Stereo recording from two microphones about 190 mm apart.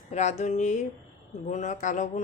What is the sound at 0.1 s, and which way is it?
Speech, 35° left (ahead or behind).